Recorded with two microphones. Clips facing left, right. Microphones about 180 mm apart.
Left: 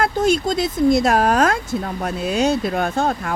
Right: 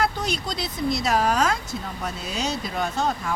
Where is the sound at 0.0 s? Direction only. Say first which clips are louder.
Left 8 dB; 50° left (ahead or behind).